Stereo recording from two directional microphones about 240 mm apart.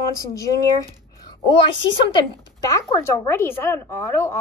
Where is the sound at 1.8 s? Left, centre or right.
Centre.